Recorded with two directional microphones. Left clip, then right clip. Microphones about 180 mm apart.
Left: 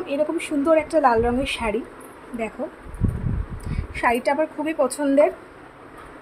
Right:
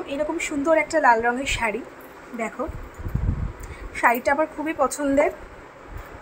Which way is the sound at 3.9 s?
15° left (ahead or behind).